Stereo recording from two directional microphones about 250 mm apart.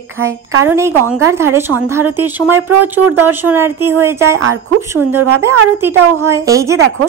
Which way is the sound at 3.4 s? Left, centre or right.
Centre.